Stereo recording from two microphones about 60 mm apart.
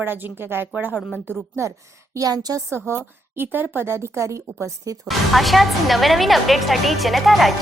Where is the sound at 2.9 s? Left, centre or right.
Right.